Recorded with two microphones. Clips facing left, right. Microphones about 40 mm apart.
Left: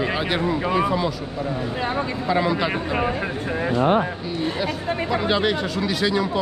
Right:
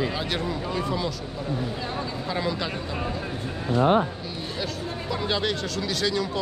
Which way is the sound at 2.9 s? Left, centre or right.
Left.